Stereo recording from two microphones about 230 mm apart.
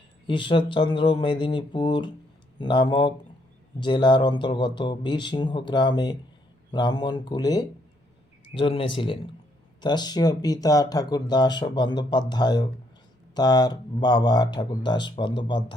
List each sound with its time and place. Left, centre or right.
0.3 s speech: left